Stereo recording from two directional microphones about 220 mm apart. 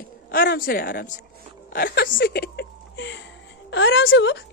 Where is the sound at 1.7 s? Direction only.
40° left (ahead or behind).